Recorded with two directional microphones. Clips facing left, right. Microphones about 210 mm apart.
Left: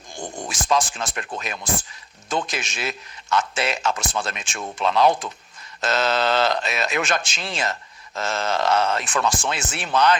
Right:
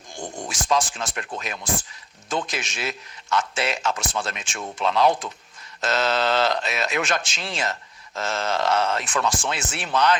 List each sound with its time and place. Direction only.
0.5 s a man's voice: 50° left (ahead or behind)